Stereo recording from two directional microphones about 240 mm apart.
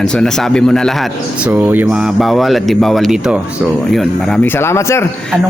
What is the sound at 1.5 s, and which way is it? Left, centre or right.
Speech, centre.